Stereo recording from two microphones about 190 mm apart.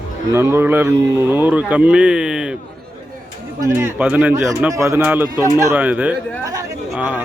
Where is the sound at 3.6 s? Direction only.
10° right (ahead or behind).